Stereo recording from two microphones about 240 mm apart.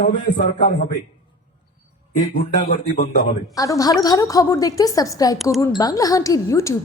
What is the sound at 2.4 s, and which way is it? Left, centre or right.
Speech, left.